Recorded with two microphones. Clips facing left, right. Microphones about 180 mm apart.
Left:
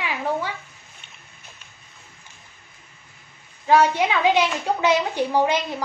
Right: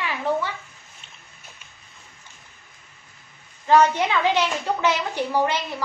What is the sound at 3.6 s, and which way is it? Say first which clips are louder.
A woman's voice: even; 10° left (ahead or behind).